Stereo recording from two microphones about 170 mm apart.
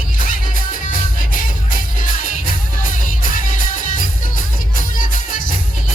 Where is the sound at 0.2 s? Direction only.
50° left (ahead or behind).